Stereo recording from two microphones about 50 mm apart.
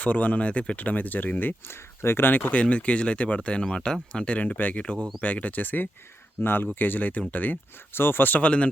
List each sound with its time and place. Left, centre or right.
0.0 s speech: left
2.5 s speech: left
4.4 s speech: left
8.4 s speech: left